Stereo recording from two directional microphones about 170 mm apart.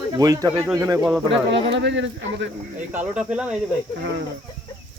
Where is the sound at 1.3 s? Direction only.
90° right.